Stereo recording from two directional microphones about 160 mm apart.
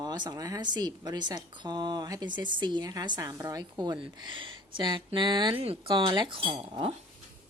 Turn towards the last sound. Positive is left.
turn(degrees=-35)  # may be behind; listen again after turning